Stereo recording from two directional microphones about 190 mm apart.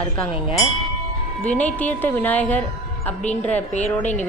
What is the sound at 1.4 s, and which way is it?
A woman's voice, 5° left (ahead or behind).